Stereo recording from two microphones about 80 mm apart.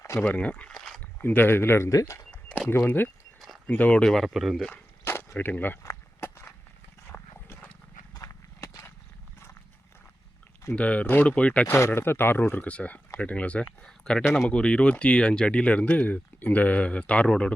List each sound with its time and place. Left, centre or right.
0.2 s speech: centre
1.2 s speech: left
1.9 s speech: left
2.6 s speech: left; by 4.6 s centre
4.7 s a sound: left
5.8 s walk: left
7.1 s roaring cats: left
8.1 s horse: left
10.8 s speech: centre
11.8 s speech: left; by 17.5 s centre